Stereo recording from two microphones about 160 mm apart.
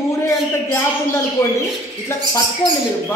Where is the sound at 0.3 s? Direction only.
15° left (ahead or behind).